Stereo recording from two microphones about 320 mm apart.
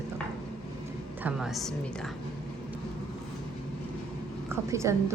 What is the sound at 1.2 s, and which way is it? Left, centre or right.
Speech, centre.